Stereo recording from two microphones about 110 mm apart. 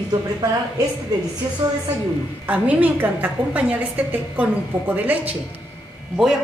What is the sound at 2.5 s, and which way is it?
A woman's voice, 15° right (ahead or behind).